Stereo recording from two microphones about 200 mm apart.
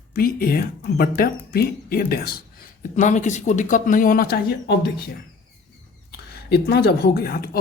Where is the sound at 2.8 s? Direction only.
40° left (ahead or behind); by 4.9 s 55° left (ahead or behind).